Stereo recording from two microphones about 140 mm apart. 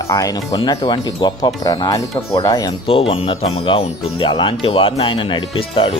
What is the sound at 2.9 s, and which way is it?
Speech, 40° left (ahead or behind).